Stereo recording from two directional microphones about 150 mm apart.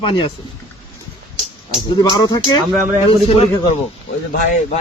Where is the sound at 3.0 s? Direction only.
40° left (ahead or behind).